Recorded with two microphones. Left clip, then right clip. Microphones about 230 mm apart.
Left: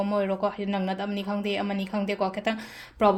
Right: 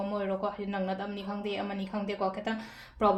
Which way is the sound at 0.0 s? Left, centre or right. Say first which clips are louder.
Left 6 dB; left.